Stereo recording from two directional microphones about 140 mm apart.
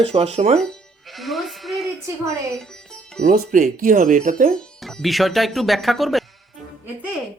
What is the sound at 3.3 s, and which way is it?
Speech, 70° right (ahead or behind).